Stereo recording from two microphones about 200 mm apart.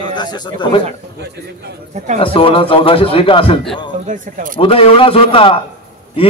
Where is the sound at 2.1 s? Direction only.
25° left (ahead or behind).